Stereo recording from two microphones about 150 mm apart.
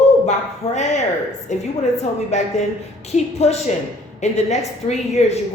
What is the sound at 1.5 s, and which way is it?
A woman's voice, 50° left (ahead or behind).